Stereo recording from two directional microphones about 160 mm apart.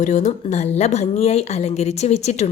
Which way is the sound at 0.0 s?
45° left (ahead or behind).